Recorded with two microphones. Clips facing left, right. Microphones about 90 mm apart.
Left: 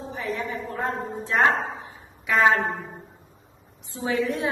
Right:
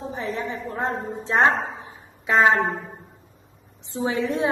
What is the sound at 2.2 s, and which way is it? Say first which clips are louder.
Speech: right 2 dB; 25° right (ahead or behind).